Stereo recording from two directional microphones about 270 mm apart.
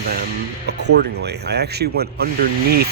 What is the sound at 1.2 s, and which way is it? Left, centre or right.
Speech, right.